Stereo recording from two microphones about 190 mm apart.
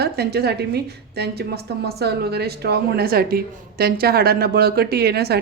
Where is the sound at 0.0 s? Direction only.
55° right (ahead or behind).